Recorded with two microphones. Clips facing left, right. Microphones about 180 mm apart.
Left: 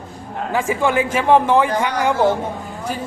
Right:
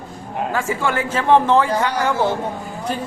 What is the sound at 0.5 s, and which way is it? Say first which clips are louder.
Speech: left 5 dB; 15° left (ahead or behind).